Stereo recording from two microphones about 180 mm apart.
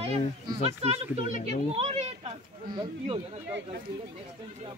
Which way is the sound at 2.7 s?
25° right (ahead or behind).